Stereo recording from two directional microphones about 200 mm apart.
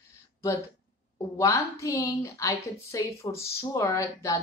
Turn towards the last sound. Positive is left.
turn(degrees=15)  # may be behind; listen again after turning